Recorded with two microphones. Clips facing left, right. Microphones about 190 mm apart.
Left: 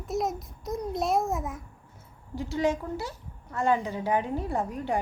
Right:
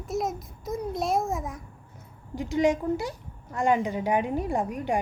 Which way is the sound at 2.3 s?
15° right (ahead or behind).